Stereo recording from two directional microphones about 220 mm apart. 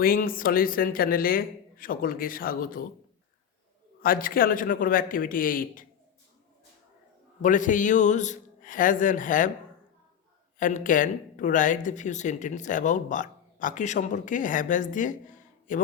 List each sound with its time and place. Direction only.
0.0 s speech: 40° left (ahead or behind)
4.0 s speech: 40° left (ahead or behind)
7.4 s speech: 35° left (ahead or behind)
10.6 s speech: 35° left (ahead or behind)